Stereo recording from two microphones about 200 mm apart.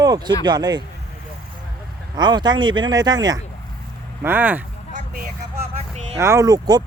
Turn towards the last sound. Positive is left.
turn(degrees=-20)  # may be behind; listen again after turning